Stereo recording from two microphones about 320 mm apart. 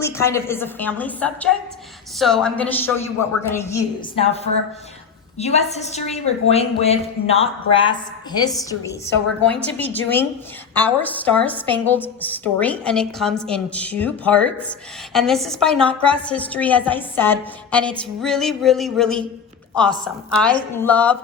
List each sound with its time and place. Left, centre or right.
0.0 s a woman's voice: centre
8.4 s a woman's voice: centre